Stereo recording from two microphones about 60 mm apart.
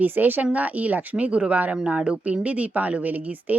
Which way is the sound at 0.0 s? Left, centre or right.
Right.